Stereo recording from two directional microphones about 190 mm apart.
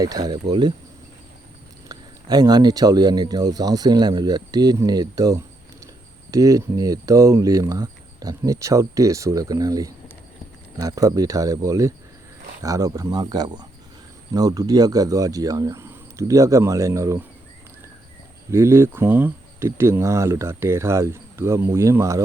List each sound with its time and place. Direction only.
0.0 s speech: 20° right (ahead or behind)
1.9 s speech: 20° right (ahead or behind)
18.5 s speech: 15° right (ahead or behind)